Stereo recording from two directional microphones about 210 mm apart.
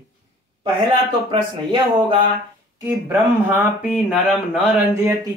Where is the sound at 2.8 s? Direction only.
10° right (ahead or behind).